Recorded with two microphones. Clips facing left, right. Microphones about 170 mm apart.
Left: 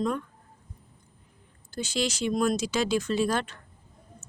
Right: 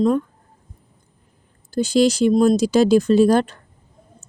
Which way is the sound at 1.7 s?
35° right (ahead or behind).